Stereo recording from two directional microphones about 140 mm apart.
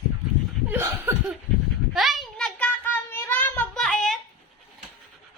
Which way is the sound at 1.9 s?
Centre (ahead or behind).